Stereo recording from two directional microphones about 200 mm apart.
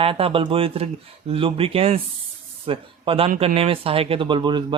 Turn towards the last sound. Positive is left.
turn(degrees=-20)  # may be behind; listen again after turning